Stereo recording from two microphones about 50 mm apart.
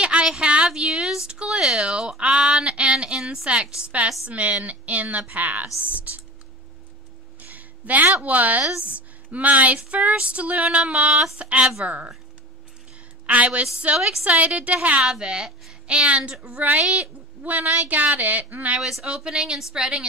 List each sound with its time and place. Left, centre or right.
0.0 s a sound: centre
3.7 s speech: right
5.8 s a sound: right
7.3 s a woman's voice: right
13.3 s speech: right
13.7 s speech: centre
14.2 s speech: right
15.0 s speech: centre
18.8 s speech: centre